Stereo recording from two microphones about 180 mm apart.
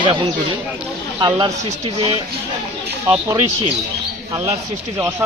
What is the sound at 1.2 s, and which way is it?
Speech, 25° right (ahead or behind).